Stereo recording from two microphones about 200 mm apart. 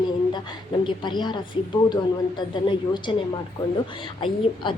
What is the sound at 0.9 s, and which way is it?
A woman's voice, 20° left (ahead or behind).